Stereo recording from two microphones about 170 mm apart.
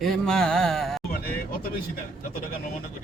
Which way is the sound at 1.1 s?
60° left (ahead or behind).